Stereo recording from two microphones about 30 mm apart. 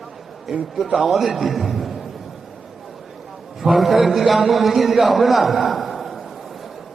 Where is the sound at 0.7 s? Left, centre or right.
Centre.